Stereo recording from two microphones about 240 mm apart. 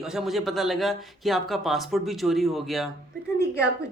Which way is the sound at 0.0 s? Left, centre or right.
Centre.